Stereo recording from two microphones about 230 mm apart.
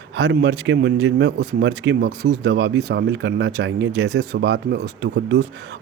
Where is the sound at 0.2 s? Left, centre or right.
Right.